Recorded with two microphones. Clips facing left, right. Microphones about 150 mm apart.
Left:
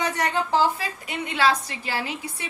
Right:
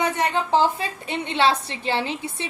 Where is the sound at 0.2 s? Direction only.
25° right (ahead or behind).